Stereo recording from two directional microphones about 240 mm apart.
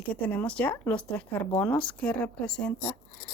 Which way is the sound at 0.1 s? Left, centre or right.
Centre.